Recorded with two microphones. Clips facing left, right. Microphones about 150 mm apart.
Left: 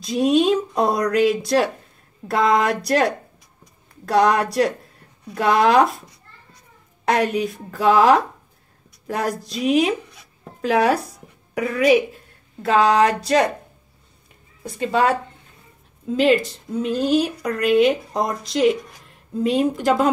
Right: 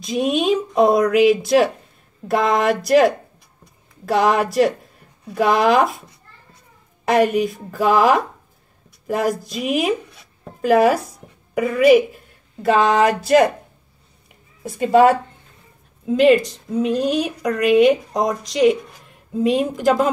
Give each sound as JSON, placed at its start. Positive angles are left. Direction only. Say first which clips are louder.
{"t": 0.0, "sound": "a woman's voice", "louder": "left 2 dB", "side_deg": 0}
{"t": 4.1, "sound": "a woman's voice", "louder": "even", "side_deg": -5}
{"t": 7.1, "sound": "a woman's voice", "louder": "right 4 dB", "side_deg": -5}
{"t": 9.4, "sound": "a woman's voice", "louder": "left 3 dB", "side_deg": 0}
{"t": 11.5, "sound": "a woman's voice", "louder": "right 4 dB", "side_deg": 0}
{"t": 14.6, "sound": "a woman's voice", "louder": "right 6 dB", "side_deg": -5}